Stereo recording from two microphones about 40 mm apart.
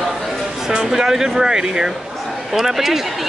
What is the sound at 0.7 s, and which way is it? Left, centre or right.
Speech, centre.